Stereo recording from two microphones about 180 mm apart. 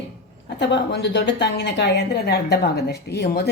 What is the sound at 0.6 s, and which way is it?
Speech, 70° left (ahead or behind).